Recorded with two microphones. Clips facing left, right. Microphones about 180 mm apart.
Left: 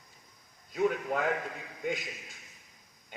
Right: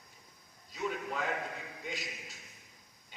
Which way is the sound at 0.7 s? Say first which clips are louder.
Left 7 dB; 55° left (ahead or behind).